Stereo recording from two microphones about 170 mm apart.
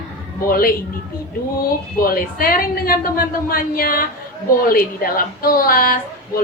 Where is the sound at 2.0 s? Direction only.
60° left (ahead or behind).